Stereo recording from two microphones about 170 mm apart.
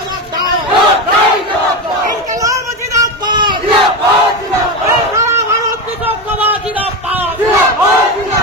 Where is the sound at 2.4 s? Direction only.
20° right (ahead or behind).